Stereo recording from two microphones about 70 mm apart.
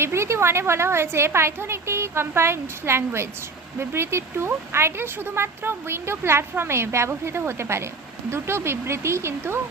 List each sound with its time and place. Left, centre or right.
0.0 s speech: right